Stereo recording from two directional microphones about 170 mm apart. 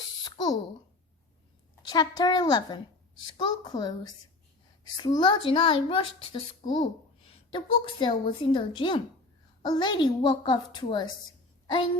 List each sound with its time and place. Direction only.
0.3 s a child's voice: 25° left (ahead or behind)
1.9 s a child's voice: 25° left (ahead or behind)
4.9 s a child's voice: 25° left (ahead or behind)